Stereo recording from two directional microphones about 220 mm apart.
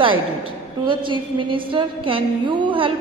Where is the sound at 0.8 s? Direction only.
20° right (ahead or behind).